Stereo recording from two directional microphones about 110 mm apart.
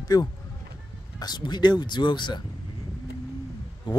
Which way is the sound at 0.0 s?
35° left (ahead or behind).